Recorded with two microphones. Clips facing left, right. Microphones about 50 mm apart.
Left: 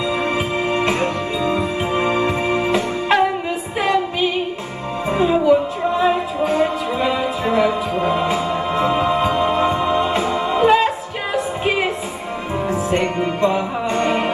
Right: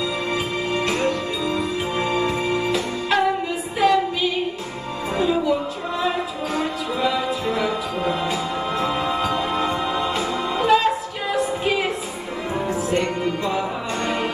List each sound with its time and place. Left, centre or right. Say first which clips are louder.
0.7 s music: left 1 dB; left